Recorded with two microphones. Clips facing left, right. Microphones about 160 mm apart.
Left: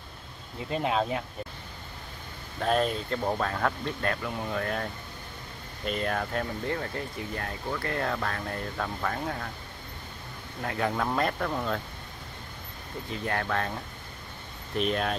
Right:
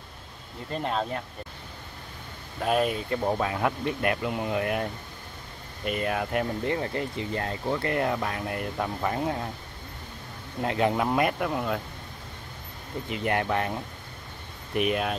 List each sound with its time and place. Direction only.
0.7 s speech: 5° left (ahead or behind)
2.6 s speech: 10° right (ahead or behind)
5.9 s speech: 5° right (ahead or behind)
6.6 s speech: 20° right (ahead or behind)
10.6 s speech: 20° right (ahead or behind)
13.1 s speech: 20° right (ahead or behind)